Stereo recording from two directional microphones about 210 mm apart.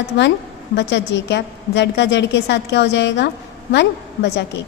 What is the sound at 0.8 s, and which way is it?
A woman's voice, 55° left (ahead or behind).